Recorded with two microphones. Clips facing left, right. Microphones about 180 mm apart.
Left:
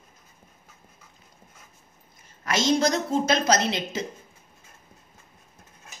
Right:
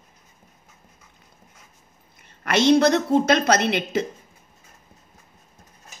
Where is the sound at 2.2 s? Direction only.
65° right (ahead or behind).